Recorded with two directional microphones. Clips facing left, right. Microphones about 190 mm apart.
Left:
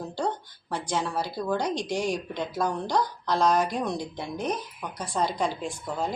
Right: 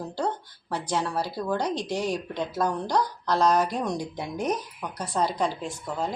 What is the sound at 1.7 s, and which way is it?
Speech, 35° right (ahead or behind).